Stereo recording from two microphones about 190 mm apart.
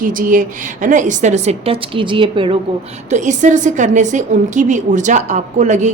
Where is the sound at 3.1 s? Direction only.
40° right (ahead or behind).